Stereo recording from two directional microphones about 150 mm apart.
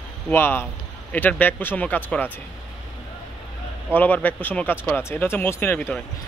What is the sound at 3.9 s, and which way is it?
Speech, 10° left (ahead or behind).